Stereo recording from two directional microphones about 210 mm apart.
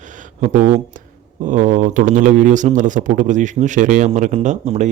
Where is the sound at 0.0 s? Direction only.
35° right (ahead or behind).